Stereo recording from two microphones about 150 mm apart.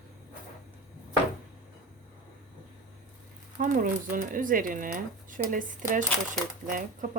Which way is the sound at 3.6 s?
65° right (ahead or behind).